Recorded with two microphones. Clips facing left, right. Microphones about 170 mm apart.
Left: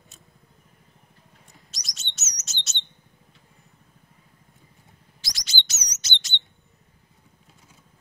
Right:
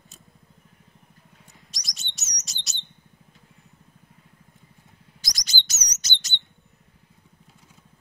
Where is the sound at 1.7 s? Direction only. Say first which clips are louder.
Left 1 dB; centre (ahead or behind).